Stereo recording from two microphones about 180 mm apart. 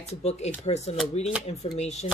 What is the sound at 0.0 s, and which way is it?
Speech, 35° left (ahead or behind).